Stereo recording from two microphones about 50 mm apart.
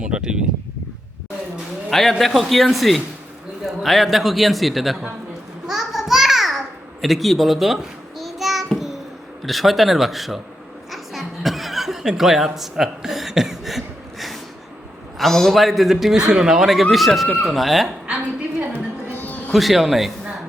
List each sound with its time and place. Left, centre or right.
0.0 s a sound: centre
1.9 s a man's voice: centre
5.6 s a sound: centre
9.4 s a man's voice: centre
10.9 s chuckle: centre
15.2 s a man's voice: centre
19.1 s music: left
19.5 s a man's voice: centre